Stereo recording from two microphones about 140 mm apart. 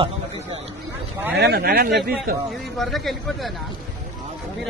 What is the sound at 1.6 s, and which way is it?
Speech, 90° right.